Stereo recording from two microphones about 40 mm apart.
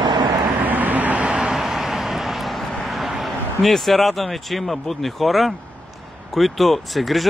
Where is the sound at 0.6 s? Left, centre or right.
Right.